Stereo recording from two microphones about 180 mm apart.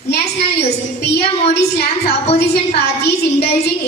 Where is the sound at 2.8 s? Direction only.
65° left (ahead or behind).